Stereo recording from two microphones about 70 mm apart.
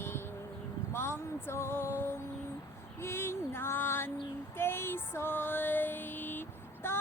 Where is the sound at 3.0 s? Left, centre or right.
Left.